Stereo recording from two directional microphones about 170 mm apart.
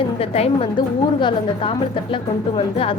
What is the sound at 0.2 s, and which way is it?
Speech, 35° left (ahead or behind).